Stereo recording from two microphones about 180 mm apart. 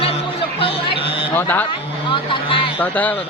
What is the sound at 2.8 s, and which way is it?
Speech, 10° left (ahead or behind).